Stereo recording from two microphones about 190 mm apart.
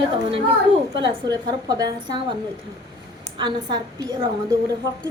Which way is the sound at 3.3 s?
25° right (ahead or behind).